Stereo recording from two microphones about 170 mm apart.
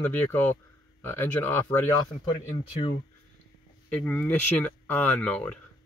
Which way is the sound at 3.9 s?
10° left (ahead or behind).